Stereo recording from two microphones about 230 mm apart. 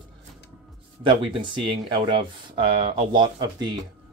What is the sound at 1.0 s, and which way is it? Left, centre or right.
Speech, right.